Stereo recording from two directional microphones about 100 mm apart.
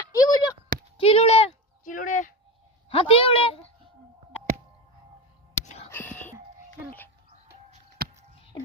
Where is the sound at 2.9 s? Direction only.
65° left (ahead or behind).